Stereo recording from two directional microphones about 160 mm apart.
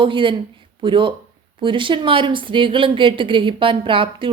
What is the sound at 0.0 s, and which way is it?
Speech, 30° right (ahead or behind).